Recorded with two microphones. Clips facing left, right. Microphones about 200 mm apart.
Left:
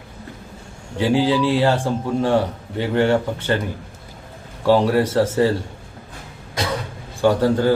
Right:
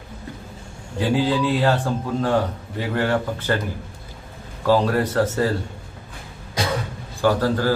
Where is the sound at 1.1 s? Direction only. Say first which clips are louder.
Left 3 dB; 25° left (ahead or behind).